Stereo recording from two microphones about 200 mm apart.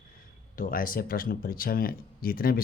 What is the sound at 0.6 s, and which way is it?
Speech, 45° left (ahead or behind).